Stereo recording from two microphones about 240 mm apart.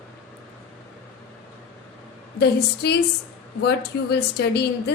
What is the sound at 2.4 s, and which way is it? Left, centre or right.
A woman's voice, left.